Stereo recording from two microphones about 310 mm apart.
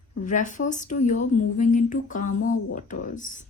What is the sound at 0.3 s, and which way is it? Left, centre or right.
Speech, left.